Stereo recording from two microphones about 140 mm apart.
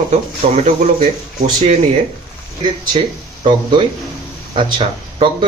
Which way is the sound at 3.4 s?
35° right (ahead or behind).